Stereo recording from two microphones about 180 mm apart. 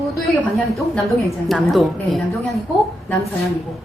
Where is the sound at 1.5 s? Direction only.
Centre (ahead or behind).